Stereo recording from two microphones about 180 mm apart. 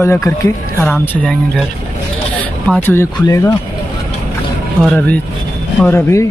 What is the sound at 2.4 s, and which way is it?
Speech, 10° left (ahead or behind).